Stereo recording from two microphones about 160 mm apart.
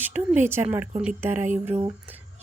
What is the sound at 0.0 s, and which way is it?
A woman's voice, 10° right (ahead or behind).